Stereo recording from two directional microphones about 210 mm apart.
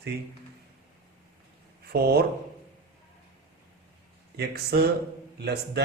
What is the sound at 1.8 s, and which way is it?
Speech, 45° right (ahead or behind).